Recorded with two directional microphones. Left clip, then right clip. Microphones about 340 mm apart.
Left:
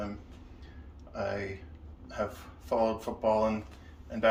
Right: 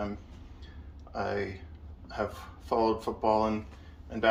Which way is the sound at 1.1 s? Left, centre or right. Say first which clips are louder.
Right 2 dB; centre.